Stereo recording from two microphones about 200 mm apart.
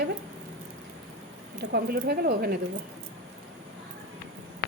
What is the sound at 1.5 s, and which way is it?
Speech, 55° right (ahead or behind).